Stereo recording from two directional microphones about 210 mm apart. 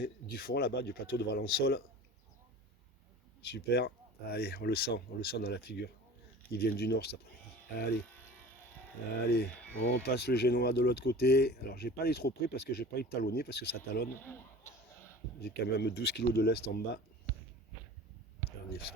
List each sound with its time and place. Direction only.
0.0 s speech: 45° left (ahead or behind)
3.4 s speech: 50° left (ahead or behind)
8.1 s electric shaver: 10° left (ahead or behind)
9.2 s speech: 50° left (ahead or behind)
9.5 s a sound: 5° left (ahead or behind)
9.8 s speech: 50° left (ahead or behind)
14.2 s speech: 10° left (ahead or behind)
15.4 s speech: 50° left (ahead or behind)